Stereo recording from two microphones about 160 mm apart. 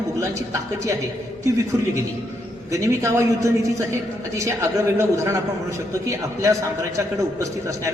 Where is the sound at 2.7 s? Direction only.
20° right (ahead or behind).